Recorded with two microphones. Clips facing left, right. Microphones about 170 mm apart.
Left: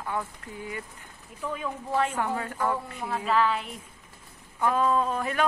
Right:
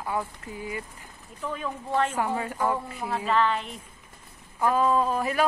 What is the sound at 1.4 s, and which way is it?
Speech, 10° left (ahead or behind).